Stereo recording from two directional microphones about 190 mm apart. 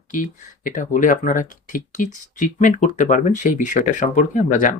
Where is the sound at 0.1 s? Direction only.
40° left (ahead or behind).